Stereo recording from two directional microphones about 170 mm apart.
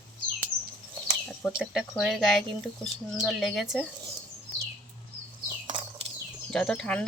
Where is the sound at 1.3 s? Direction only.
Centre (ahead or behind).